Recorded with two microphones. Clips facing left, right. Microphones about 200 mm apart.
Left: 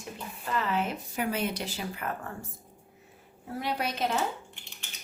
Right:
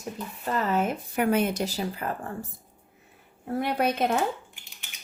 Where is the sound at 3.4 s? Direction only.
55° right (ahead or behind).